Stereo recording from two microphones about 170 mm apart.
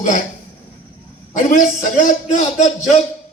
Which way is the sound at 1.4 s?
50° left (ahead or behind).